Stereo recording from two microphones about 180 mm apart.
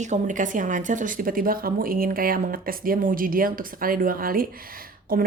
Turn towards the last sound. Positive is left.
turn(degrees=-55)  # may be behind; listen again after turning